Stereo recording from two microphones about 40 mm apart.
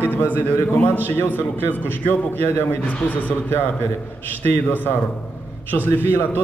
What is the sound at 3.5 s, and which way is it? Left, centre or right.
Speech, left.